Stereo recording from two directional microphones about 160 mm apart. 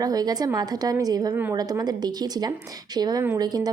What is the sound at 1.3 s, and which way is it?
Speech, 15° right (ahead or behind).